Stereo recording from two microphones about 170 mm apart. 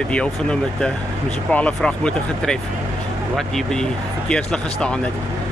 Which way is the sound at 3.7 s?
5° left (ahead or behind).